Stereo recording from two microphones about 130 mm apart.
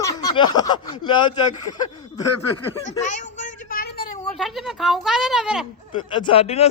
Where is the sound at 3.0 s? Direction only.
70° left (ahead or behind).